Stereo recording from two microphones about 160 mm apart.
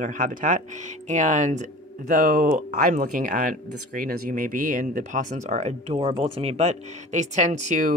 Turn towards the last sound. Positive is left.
turn(degrees=-50)  # may be behind; listen again after turning